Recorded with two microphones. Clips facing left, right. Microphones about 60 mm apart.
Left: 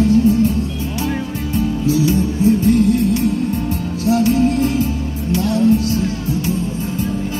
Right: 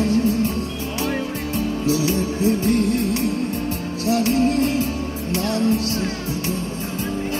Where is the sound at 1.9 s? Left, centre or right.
Right.